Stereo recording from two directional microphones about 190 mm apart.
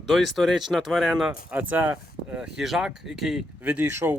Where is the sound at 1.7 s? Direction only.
10° right (ahead or behind).